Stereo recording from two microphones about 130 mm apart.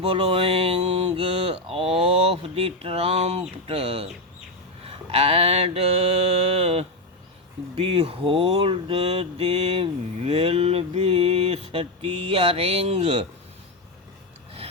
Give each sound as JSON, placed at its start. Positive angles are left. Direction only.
{"t": 0.0, "sound": "mantra", "side_deg": -50}
{"t": 5.1, "sound": "mantra", "side_deg": -50}